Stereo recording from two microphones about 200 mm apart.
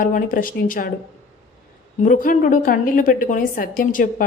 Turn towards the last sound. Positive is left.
turn(degrees=40)  # may be behind; listen again after turning